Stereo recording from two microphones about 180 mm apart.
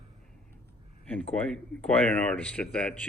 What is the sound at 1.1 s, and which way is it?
Speech, 5° left (ahead or behind).